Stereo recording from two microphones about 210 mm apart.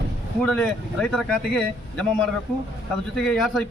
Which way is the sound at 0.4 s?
5° left (ahead or behind).